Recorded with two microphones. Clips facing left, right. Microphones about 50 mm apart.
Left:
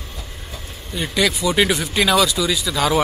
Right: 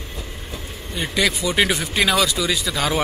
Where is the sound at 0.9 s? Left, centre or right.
Centre.